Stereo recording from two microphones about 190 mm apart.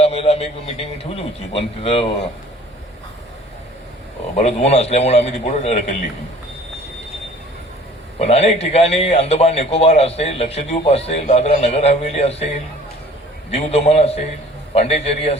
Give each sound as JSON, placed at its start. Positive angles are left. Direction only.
{"t": 0.0, "sound": "a sound", "side_deg": 30}
{"t": 1.1, "sound": "speech", "side_deg": 30}
{"t": 4.4, "sound": "a man's voice", "side_deg": 35}
{"t": 8.2, "sound": "a man's voice", "side_deg": 35}
{"t": 13.5, "sound": "a man's voice", "side_deg": 35}